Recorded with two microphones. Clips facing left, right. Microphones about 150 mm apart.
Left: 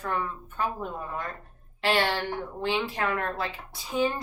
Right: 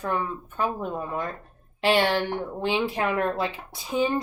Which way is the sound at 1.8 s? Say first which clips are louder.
Right 4 dB; 15° right (ahead or behind).